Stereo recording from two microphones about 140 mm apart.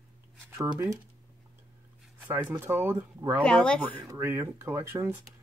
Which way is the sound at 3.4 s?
5° left (ahead or behind).